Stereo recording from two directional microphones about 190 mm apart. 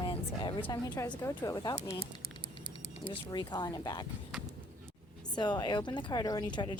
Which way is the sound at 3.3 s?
20° left (ahead or behind).